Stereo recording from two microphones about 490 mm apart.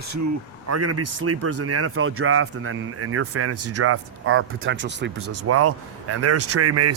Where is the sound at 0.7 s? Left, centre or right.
Right.